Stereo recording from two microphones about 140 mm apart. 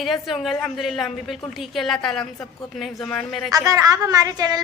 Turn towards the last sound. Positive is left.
turn(degrees=-25)  # may be behind; listen again after turning